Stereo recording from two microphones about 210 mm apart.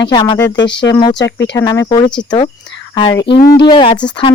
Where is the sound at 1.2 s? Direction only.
55° left (ahead or behind).